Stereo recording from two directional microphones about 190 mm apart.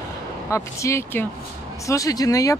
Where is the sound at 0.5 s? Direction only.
15° left (ahead or behind).